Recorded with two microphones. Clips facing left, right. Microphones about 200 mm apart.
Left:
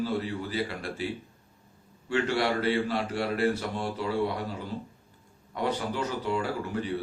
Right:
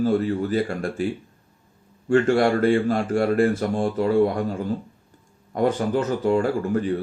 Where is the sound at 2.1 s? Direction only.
50° right (ahead or behind).